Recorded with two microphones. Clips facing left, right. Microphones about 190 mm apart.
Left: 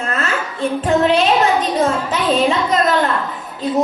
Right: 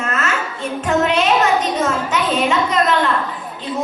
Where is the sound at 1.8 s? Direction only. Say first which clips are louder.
Left 2 dB; 35° left (ahead or behind).